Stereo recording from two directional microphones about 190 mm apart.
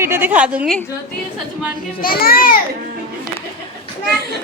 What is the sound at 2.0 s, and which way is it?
Speech, 50° left (ahead or behind).